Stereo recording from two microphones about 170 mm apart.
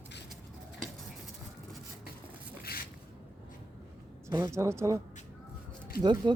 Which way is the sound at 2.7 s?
65° left (ahead or behind).